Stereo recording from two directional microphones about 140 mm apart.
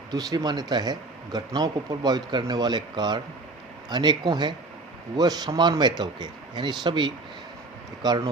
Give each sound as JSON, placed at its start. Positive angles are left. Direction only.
{"t": 0.1, "sound": "speech", "side_deg": -30}